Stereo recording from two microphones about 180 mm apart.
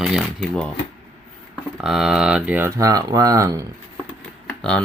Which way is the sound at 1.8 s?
5° right (ahead or behind).